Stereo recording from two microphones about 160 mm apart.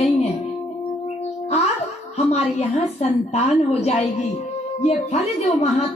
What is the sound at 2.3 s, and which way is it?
A woman's voice, 40° left (ahead or behind).